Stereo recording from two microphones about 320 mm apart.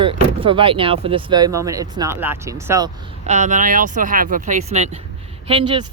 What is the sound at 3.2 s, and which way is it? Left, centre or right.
Speech, right.